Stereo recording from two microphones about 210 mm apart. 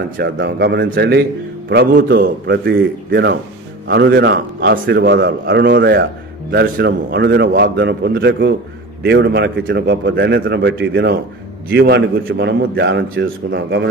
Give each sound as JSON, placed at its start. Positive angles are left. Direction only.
{"t": 0.2, "sound": "a man's voice", "side_deg": -50}